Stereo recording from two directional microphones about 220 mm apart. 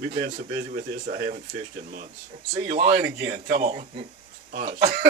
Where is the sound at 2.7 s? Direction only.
40° right (ahead or behind).